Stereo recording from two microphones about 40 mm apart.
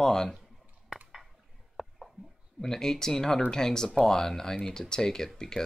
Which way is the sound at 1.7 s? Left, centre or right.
Centre.